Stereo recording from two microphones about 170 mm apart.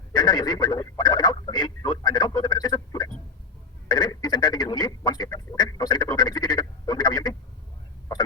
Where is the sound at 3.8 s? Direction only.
25° left (ahead or behind).